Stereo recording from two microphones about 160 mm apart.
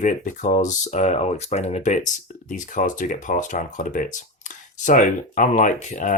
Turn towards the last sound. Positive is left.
turn(degrees=50)  # may be behind; listen again after turning